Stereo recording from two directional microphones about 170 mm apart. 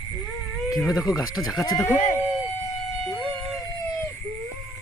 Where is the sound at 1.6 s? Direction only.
25° left (ahead or behind).